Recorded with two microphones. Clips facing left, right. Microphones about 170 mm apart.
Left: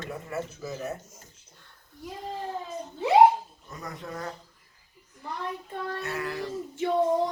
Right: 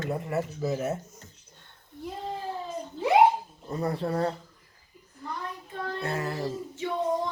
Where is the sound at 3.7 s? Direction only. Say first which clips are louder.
Right 10 dB; 30° right (ahead or behind).